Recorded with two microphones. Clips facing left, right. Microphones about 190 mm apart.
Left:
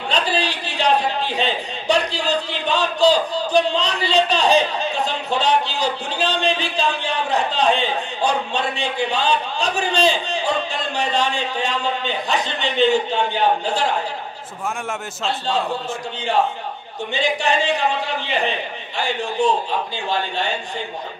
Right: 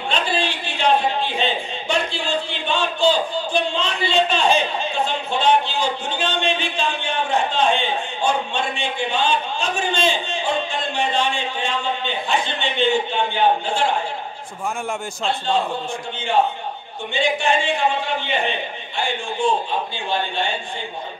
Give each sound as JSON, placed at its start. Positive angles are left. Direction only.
{"t": 0.1, "sound": "a sound", "side_deg": 40}
{"t": 15.2, "sound": "a man's voice", "side_deg": 35}
{"t": 17.1, "sound": "a man's voice", "side_deg": 35}